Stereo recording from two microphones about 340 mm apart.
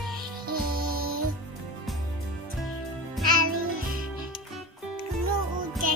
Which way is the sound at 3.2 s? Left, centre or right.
Centre.